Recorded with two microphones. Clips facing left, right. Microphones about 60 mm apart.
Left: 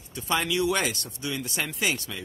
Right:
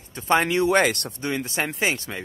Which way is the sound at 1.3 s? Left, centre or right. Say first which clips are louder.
Right 5 dB; right.